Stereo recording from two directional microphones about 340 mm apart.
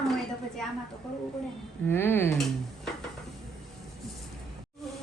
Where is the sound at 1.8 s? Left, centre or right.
Centre.